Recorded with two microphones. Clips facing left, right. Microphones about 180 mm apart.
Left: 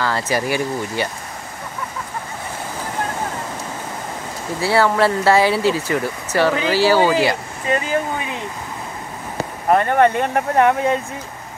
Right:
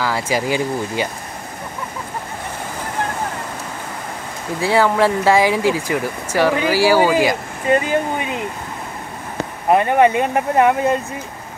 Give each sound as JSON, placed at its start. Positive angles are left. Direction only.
{"t": 0.0, "sound": "speech", "side_deg": -10}
{"t": 4.6, "sound": "speech", "side_deg": -15}
{"t": 9.7, "sound": "speech", "side_deg": -10}